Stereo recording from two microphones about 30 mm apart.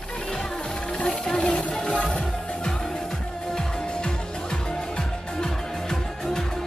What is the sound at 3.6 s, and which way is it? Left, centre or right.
Music, left.